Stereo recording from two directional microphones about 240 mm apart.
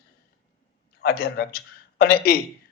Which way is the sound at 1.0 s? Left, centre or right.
Left.